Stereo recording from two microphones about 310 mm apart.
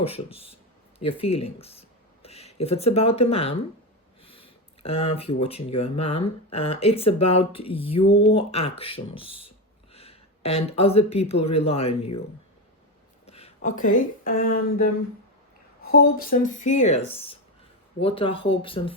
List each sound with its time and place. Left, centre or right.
0.0 s speech: centre
13.2 s speech: centre
15.8 s speech: left
18.0 s speech: centre